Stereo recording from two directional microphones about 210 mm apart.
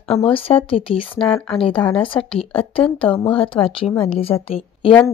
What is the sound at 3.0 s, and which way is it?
Speech, 5° left (ahead or behind).